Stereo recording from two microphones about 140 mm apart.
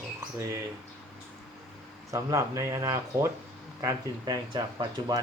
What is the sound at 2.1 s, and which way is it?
Speech, 20° right (ahead or behind).